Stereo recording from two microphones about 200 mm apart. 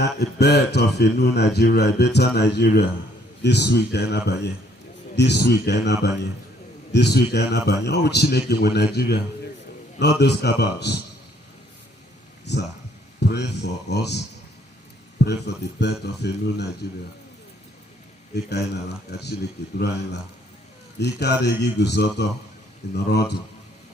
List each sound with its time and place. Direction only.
0.0 s speech: 55° left (ahead or behind)
13.1 s speech: 60° left (ahead or behind)
15.2 s speech: 55° left (ahead or behind)
18.4 s speech: 55° left (ahead or behind)